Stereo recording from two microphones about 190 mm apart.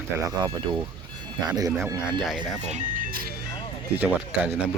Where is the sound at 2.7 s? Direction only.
45° right (ahead or behind).